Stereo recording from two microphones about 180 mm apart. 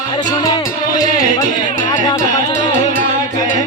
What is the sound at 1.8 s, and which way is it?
Music, 20° left (ahead or behind).